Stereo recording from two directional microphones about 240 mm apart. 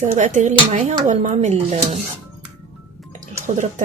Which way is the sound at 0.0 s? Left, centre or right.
Right.